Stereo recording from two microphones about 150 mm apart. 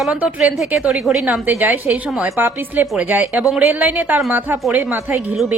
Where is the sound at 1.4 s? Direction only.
10° right (ahead or behind).